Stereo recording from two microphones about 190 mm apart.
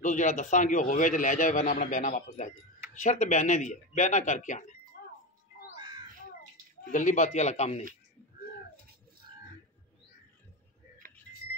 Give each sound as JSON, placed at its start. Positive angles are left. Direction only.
{"t": 0.0, "sound": "a man's voice", "side_deg": 40}
{"t": 6.9, "sound": "speech", "side_deg": 40}
{"t": 11.0, "sound": "a sound", "side_deg": -45}